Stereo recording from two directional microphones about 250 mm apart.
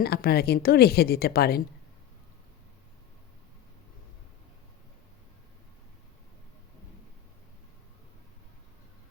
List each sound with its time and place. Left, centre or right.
0.0 s a woman's voice: left